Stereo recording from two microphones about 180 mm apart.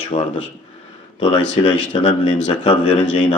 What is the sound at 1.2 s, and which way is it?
Speech, 25° left (ahead or behind).